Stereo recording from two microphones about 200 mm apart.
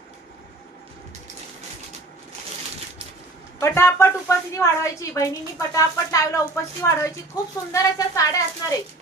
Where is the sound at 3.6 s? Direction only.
15° left (ahead or behind).